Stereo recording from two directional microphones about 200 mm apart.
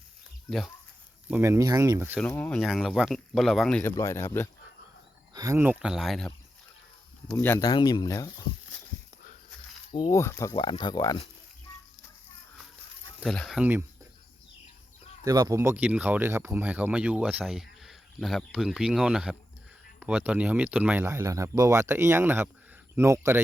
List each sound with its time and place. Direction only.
1.3 s speech: 10° right (ahead or behind)
2.1 s speech: 5° left (ahead or behind)
4.0 s speech: 15° left (ahead or behind)
5.3 s speech: 15° right (ahead or behind); by 6.3 s centre (ahead or behind)
7.3 s speech: 10° left (ahead or behind)
9.9 s speech: 20° left (ahead or behind)
10.5 s speech: 25° left (ahead or behind)
13.1 s speech: centre (ahead or behind)
15.2 s speech: 15° right (ahead or behind)